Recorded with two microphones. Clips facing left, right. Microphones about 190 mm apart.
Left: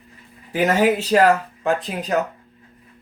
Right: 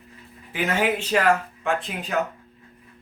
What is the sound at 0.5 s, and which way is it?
Speech, 40° left (ahead or behind).